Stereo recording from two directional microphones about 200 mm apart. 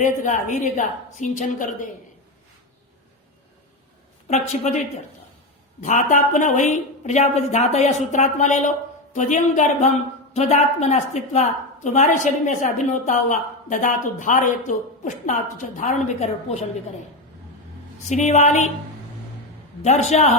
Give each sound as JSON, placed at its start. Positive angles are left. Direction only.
{"t": 0.0, "sound": "a woman's voice", "side_deg": 40}
{"t": 4.3, "sound": "a woman's voice", "side_deg": 35}
{"t": 5.8, "sound": "a woman's voice", "side_deg": 40}
{"t": 18.1, "sound": "a woman's voice", "side_deg": 35}
{"t": 19.8, "sound": "a woman's voice", "side_deg": 35}